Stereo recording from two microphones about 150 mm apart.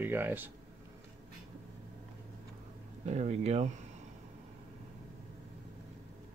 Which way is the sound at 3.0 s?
50° right (ahead or behind).